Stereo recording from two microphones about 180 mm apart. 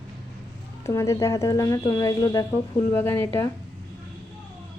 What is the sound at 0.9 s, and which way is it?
A woman's voice, 15° left (ahead or behind).